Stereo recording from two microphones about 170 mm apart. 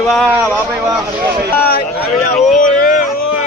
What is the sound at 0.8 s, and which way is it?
Speech, 15° right (ahead or behind).